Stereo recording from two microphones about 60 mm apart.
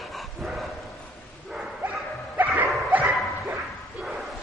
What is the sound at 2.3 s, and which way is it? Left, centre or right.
Dog, right.